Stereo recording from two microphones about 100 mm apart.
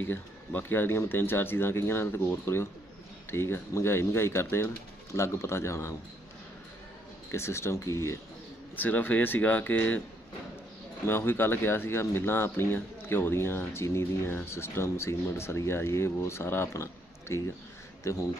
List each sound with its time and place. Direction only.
0.0 s speech: 20° left (ahead or behind)
7.2 s speech: 25° left (ahead or behind)
8.7 s speech: 20° left (ahead or behind)
11.1 s speech: 25° left (ahead or behind)